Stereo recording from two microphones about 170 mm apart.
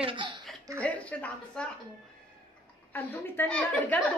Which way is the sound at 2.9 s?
10° left (ahead or behind).